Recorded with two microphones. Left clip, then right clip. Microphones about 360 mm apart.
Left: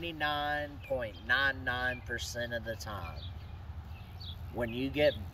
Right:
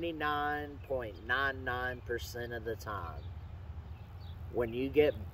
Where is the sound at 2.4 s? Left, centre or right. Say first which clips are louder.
Left 2 dB; right.